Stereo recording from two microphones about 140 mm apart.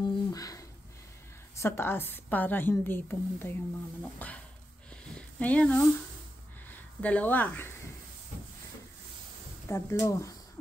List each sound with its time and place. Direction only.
0.0 s a sound: 25° left (ahead or behind)
1.6 s a woman's voice: 15° left (ahead or behind)
5.4 s a woman's voice: 10° left (ahead or behind)
7.0 s a woman's voice: 10° left (ahead or behind)
9.7 s speech: 20° left (ahead or behind)